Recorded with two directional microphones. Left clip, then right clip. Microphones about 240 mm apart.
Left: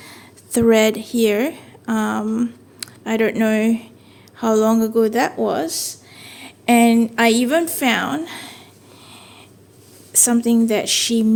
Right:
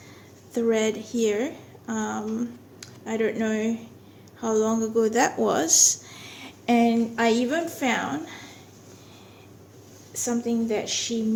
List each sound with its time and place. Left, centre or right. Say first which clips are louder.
0.0 s a woman's voice: left 7 dB; left
5.0 s speech: left 4 dB; left
6.7 s a woman's voice: left 7 dB; left
10.1 s a woman's voice: left 9 dB; left